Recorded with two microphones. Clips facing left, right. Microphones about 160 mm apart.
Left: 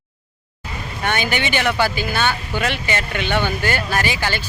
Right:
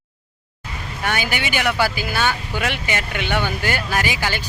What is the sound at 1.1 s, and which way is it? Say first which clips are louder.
Speech: left 2 dB; 10° right (ahead or behind).